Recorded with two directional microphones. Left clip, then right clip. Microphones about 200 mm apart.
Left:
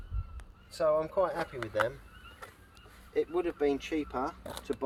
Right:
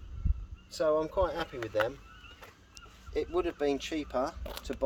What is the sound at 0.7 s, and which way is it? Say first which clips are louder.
Speech: even; 50° right (ahead or behind).